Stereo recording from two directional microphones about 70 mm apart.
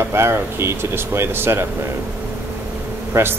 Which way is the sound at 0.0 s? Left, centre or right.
Right.